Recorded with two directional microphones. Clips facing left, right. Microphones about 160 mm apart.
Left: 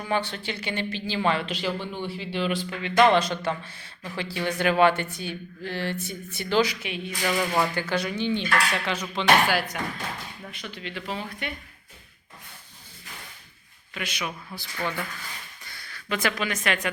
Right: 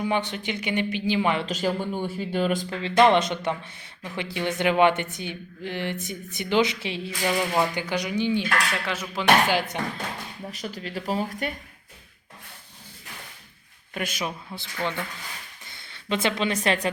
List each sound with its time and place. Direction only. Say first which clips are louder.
0.0 s speech: right 2 dB; 15° right (ahead or behind)
1.5 s speech: right 3 dB; 45° right (ahead or behind)
2.7 s a woman's voice: right 1 dB; 25° right (ahead or behind)
7.3 s speech: even; 15° right (ahead or behind)
9.5 s a woman's voice: right 1 dB; 20° right (ahead or behind)
10.5 s speech: right 4 dB; 40° right (ahead or behind)
13.9 s speech: right 3 dB; 45° right (ahead or behind)
14.3 s a woman's voice: right 2 dB; 25° right (ahead or behind)